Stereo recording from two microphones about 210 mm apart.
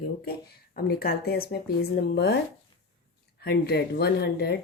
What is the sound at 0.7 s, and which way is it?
A woman's voice, 50° left (ahead or behind).